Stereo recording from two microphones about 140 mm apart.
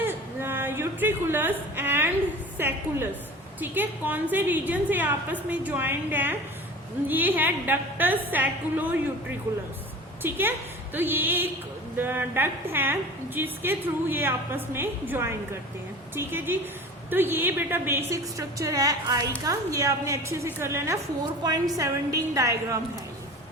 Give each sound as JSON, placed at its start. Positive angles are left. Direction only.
{"t": 0.0, "sound": "a sound", "side_deg": -15}
{"t": 2.6, "sound": "a woman's voice", "side_deg": -15}
{"t": 10.2, "sound": "a woman's voice", "side_deg": -15}